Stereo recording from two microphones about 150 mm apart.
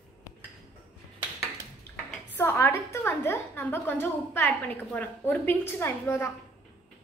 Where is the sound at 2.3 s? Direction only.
15° left (ahead or behind).